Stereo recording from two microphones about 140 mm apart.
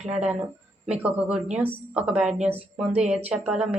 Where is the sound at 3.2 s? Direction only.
10° right (ahead or behind).